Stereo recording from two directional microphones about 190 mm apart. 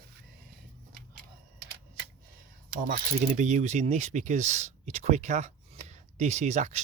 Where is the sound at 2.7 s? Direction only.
50° right (ahead or behind).